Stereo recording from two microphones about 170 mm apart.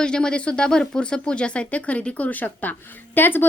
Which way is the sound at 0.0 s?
5° left (ahead or behind).